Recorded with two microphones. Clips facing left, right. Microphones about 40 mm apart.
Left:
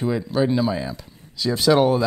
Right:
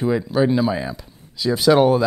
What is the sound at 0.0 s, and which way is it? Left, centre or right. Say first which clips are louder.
Speech: right 3 dB; centre.